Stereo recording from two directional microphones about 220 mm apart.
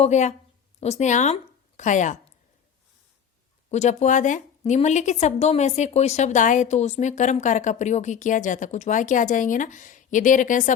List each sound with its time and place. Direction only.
0.0 s a woman's voice: 30° left (ahead or behind)
3.7 s a woman's voice: 30° left (ahead or behind)